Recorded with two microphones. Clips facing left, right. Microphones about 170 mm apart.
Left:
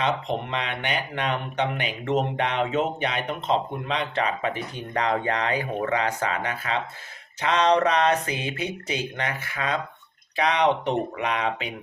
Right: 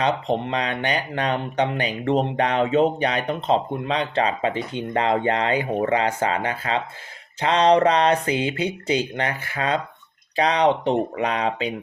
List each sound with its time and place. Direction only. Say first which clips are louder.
0.0 s speech: right 4 dB; 30° right (ahead or behind)